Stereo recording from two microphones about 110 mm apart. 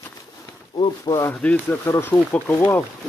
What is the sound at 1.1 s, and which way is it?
Speech, 25° left (ahead or behind).